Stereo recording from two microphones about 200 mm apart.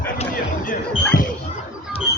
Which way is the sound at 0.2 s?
40° left (ahead or behind).